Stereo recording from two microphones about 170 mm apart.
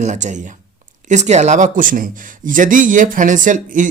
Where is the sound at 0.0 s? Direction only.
45° right (ahead or behind).